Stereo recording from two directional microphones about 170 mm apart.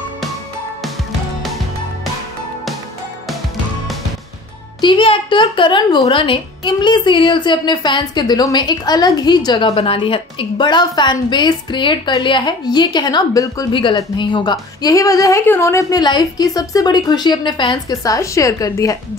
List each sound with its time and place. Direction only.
4.8 s a child's voice: 30° left (ahead or behind)